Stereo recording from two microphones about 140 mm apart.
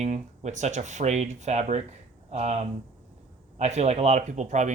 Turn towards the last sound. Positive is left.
turn(degrees=-60)  # may be behind; listen again after turning